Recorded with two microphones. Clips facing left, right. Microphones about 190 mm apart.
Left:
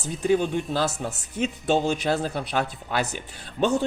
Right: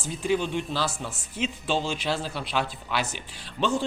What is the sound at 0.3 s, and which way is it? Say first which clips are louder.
Speech: left 4 dB; 45° left (ahead or behind).